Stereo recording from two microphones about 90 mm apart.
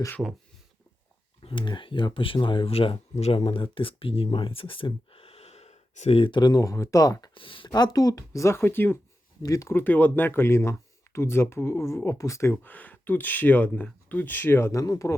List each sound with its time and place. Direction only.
0.2 s speech: 20° right (ahead or behind)
1.4 s speech: 80° left
6.1 s speech: 65° left (ahead or behind); by 7.3 s 40° left (ahead or behind)
7.3 s speech: 75° left (ahead or behind)
7.7 s speech: 45° left (ahead or behind); by 9.0 s 20° left (ahead or behind)
9.4 s speech: 40° left (ahead or behind)
9.7 s speech: 20° left (ahead or behind)
12.7 s speech: 20° left (ahead or behind); by 15.1 s 35° left (ahead or behind)